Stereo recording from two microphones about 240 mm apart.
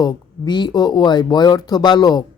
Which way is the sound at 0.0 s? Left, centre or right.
Centre.